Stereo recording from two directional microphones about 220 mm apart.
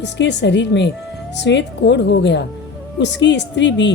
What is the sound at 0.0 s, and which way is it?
A woman's voice, 50° left (ahead or behind).